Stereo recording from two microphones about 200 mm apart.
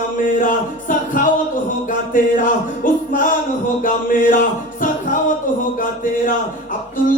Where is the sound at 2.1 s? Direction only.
40° left (ahead or behind).